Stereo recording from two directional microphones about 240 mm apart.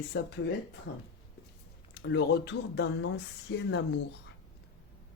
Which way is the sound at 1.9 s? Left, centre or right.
Left.